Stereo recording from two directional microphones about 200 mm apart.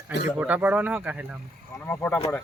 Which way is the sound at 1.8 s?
10° left (ahead or behind).